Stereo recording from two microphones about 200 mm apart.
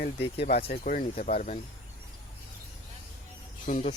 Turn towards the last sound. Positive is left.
turn(degrees=40)  # may be behind; listen again after turning